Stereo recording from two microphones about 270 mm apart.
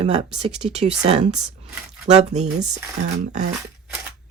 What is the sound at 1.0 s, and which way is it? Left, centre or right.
Speech, right.